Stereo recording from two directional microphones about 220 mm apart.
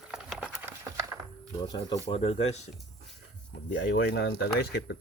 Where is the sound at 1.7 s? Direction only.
20° left (ahead or behind).